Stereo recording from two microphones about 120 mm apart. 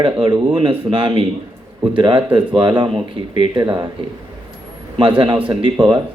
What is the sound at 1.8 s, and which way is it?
A man's voice, 45° right (ahead or behind).